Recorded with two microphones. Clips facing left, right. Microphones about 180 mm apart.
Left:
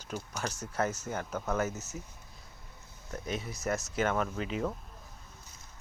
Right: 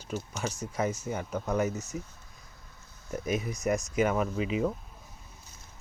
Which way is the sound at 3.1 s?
15° right (ahead or behind).